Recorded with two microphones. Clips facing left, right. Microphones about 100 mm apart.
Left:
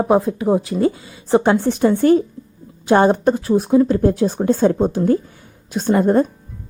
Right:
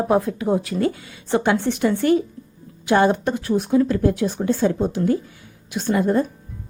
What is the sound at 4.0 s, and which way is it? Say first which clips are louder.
A woman's voice: left 4 dB; 40° left (ahead or behind).